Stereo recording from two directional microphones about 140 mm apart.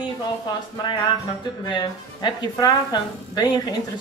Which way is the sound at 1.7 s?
35° left (ahead or behind).